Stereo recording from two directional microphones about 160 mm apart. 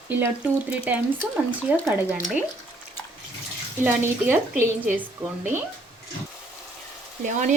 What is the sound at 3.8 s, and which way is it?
Speech, 10° right (ahead or behind).